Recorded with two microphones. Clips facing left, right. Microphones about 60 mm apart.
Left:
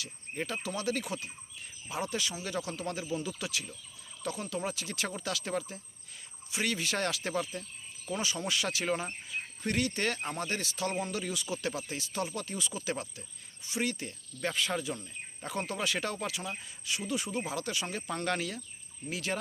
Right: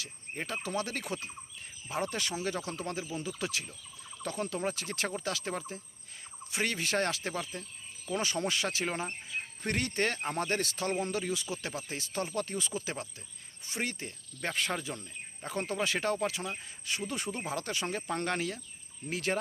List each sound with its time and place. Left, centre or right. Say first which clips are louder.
0.0 s speech: left 2 dB; right
2.3 s speech: right 2 dB; right
8.2 s speech: right 1 dB; right
8.8 s speech: left 2 dB; centre
9.6 s speech: even; right
10.2 s speech: right 3 dB; right
10.4 s speech: right 3 dB; right
11.0 s speech: right 2 dB; right
17.1 s speech: left 2 dB; right
19.1 s speech: right 2 dB; right